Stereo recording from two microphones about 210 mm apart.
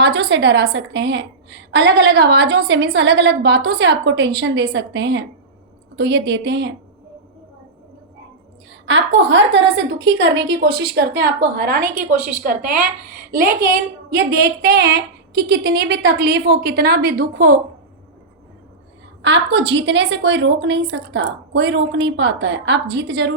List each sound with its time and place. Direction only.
0.0 s a woman's voice: 50° right (ahead or behind)
8.7 s a woman's voice: 60° right (ahead or behind); by 17.6 s 45° right (ahead or behind)
19.2 s a woman's voice: 55° right (ahead or behind)